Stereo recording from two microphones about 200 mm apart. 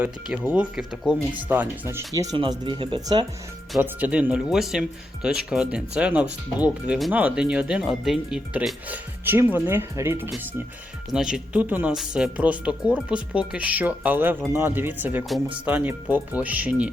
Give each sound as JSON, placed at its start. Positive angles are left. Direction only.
{"t": 0.5, "sound": "speech", "side_deg": -5}
{"t": 3.8, "sound": "speech", "side_deg": -10}